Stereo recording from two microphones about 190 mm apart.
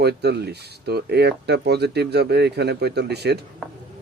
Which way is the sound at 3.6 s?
Centre (ahead or behind).